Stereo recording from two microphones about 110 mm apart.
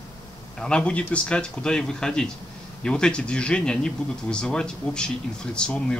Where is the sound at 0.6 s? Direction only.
10° left (ahead or behind).